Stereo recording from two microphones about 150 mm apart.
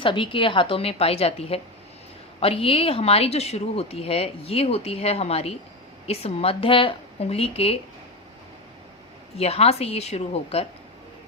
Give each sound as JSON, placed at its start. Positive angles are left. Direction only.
{"t": 0.0, "sound": "a woman's voice", "side_deg": 35}
{"t": 9.4, "sound": "speech", "side_deg": 45}